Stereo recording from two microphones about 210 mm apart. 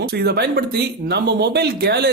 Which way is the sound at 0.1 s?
50° right (ahead or behind).